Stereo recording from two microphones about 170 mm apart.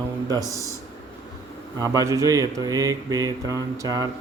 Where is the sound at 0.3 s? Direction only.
20° right (ahead or behind).